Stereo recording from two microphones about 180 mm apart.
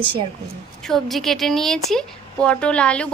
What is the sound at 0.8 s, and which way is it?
Speech, centre (ahead or behind).